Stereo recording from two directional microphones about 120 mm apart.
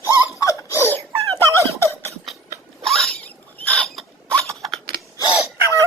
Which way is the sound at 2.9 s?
5° left (ahead or behind).